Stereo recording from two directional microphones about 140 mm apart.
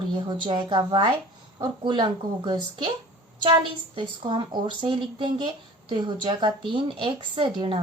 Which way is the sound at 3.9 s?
35° right (ahead or behind).